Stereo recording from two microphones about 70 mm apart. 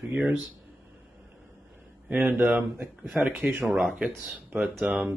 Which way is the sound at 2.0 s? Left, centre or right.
Right.